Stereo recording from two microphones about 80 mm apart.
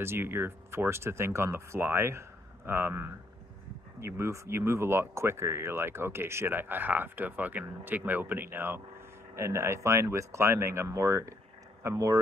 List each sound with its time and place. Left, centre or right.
0.0 s speech: right